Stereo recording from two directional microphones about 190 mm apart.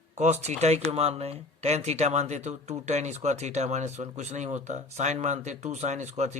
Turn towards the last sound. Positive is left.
turn(degrees=-40)  # may be behind; listen again after turning